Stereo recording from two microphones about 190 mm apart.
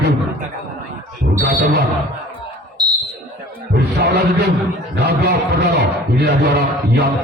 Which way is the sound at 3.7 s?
60° right (ahead or behind).